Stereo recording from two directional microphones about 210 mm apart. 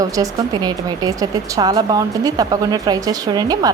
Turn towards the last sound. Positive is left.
turn(degrees=-20)  # may be behind; listen again after turning